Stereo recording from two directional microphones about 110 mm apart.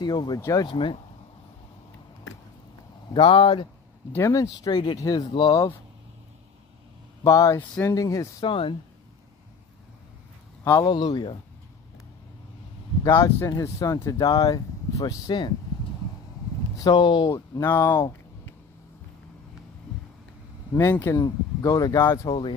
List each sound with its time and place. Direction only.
0.0 s speech: 40° left (ahead or behind)
0.4 s speech: 30° left (ahead or behind)
0.7 s speech: 50° left (ahead or behind)
3.1 s speech: 55° left (ahead or behind)
4.3 s speech: 30° left (ahead or behind)
7.2 s speech: 30° left (ahead or behind)
8.5 s speech: 50° left (ahead or behind)
10.6 s speech: 25° left (ahead or behind)
10.9 s speech: 40° left (ahead or behind)
13.0 s speech: 25° left (ahead or behind); by 15.5 s 45° left (ahead or behind)
16.7 s speech: 40° left (ahead or behind)
17.3 s speech: 25° left (ahead or behind)
20.9 s speech: 25° left (ahead or behind)
22.3 s speech: 45° left (ahead or behind)